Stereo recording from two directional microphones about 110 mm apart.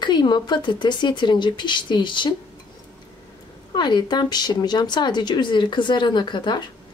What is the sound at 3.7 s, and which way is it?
Speech, 45° left (ahead or behind).